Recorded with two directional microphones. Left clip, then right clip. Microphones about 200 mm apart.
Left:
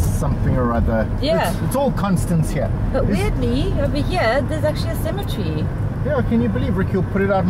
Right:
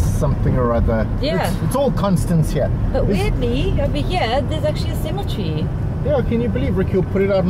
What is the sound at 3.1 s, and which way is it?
Speech, 5° left (ahead or behind).